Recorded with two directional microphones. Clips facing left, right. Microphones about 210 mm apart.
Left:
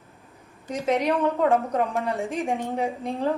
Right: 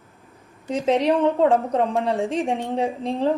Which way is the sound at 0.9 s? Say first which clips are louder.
Right 4 dB; 30° right (ahead or behind).